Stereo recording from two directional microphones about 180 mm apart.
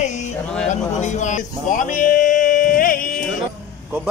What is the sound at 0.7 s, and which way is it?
Speech, 40° left (ahead or behind).